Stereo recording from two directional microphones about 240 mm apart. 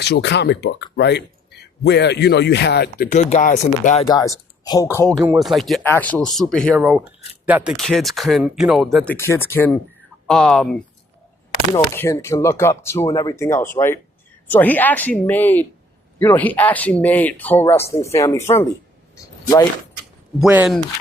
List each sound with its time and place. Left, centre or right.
0.0 s speech: left
4.0 s speech: centre
5.1 s speech: centre
19.1 s a sound: centre
20.4 s speech: centre